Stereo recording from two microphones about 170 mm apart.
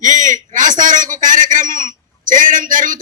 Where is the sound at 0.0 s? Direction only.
50° right (ahead or behind).